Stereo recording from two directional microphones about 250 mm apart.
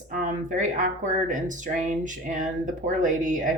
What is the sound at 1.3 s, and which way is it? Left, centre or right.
Speech, right.